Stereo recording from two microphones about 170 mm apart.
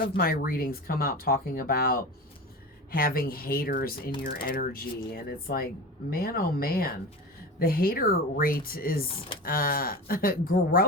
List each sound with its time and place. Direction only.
0.2 s speech: 60° left (ahead or behind)